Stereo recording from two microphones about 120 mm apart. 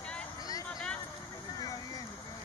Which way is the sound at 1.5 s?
30° left (ahead or behind).